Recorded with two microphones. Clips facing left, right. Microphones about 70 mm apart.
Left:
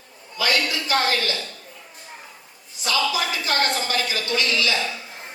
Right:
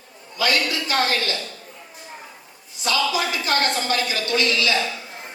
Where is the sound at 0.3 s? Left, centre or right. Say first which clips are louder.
Right 1 dB; right.